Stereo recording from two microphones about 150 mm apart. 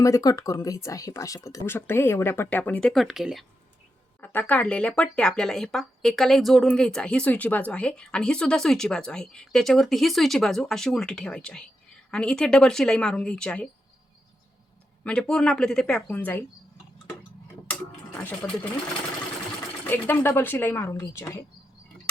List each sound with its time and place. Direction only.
0.0 s speech: 25° left (ahead or behind); by 3.4 s centre (ahead or behind)
4.2 s speech: 10° left (ahead or behind)
15.0 s speech: 5° left (ahead or behind)
18.2 s speech: 10° left (ahead or behind)
19.9 s speech: 15° left (ahead or behind)